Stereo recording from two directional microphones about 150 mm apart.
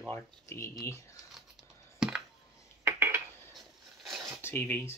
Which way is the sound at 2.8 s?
15° right (ahead or behind).